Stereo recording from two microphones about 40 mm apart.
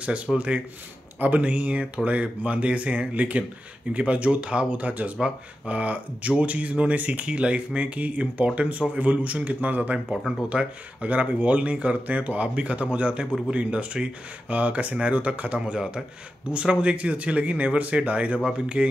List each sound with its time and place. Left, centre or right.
0.3 s speech: centre
1.2 s speech: right
10.5 s speech: right
15.6 s speech: right